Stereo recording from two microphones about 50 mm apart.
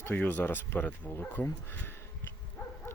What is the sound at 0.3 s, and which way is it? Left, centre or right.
Speech, left.